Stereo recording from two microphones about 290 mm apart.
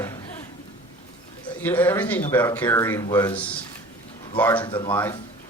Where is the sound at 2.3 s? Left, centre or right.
Centre.